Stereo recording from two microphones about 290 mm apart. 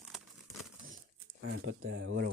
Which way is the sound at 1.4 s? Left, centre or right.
Right.